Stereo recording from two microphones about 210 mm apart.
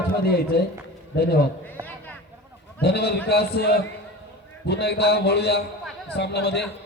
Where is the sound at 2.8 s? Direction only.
50° left (ahead or behind).